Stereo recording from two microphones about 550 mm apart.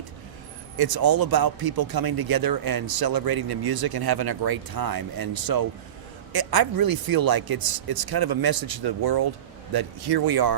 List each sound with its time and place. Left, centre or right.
0.8 s speech: right